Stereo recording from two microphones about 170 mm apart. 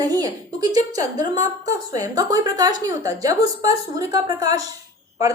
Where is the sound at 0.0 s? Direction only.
20° right (ahead or behind).